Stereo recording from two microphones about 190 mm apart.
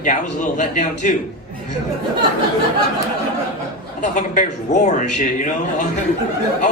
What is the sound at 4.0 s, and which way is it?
A man's voice, 40° left (ahead or behind).